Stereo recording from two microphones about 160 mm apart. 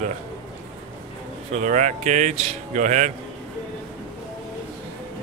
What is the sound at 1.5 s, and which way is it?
Speech, 50° right (ahead or behind).